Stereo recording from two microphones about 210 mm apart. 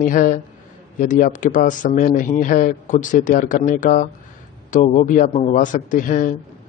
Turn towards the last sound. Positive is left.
turn(degrees=40)  # may be behind; listen again after turning